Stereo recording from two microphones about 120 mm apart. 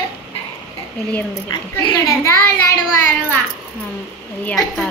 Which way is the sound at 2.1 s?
20° left (ahead or behind).